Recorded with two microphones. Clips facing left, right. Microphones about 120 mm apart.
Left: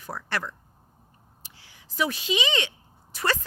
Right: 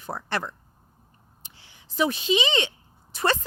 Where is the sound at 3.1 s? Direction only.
25° right (ahead or behind).